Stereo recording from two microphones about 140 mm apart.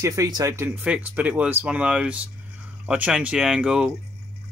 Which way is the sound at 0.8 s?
10° right (ahead or behind).